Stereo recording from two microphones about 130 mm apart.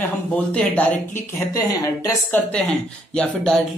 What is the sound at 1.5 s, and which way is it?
Speech, 25° left (ahead or behind).